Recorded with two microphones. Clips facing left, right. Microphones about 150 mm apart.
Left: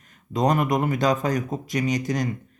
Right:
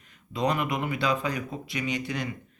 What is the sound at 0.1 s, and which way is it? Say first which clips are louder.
Speech: left 5 dB; 45° left (ahead or behind).